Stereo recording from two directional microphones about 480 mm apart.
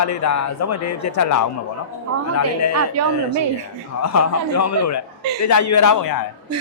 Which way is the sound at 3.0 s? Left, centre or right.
Right.